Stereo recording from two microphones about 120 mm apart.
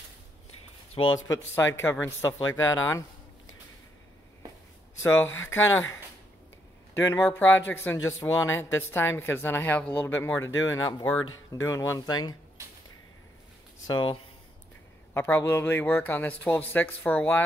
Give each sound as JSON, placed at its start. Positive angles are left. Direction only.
{"t": 1.1, "sound": "speech", "side_deg": 25}
{"t": 5.0, "sound": "speech", "side_deg": 20}
{"t": 6.9, "sound": "speech", "side_deg": 20}
{"t": 13.8, "sound": "speech", "side_deg": 40}
{"t": 15.1, "sound": "speech", "side_deg": 20}